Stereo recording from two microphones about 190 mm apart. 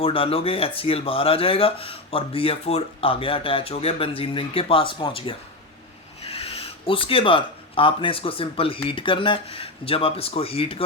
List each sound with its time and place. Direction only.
0.0 s speech: 30° left (ahead or behind)